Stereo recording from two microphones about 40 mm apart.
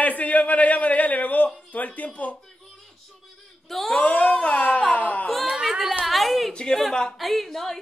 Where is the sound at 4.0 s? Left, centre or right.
Left.